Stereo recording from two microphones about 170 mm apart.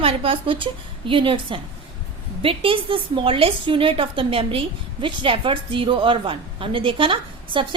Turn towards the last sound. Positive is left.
turn(degrees=-30)  # may be behind; listen again after turning